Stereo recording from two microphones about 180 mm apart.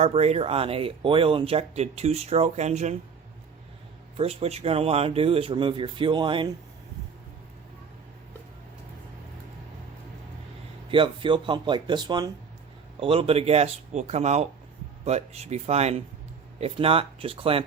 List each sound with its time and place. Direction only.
0.0 s speech: 35° right (ahead or behind)
4.2 s speech: 35° right (ahead or behind)
10.9 s speech: 30° right (ahead or behind)